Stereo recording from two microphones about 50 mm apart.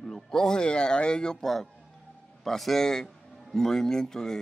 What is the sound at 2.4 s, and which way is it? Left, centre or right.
Speech, centre.